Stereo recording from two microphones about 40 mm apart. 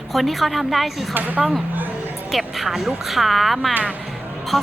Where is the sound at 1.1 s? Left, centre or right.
Right.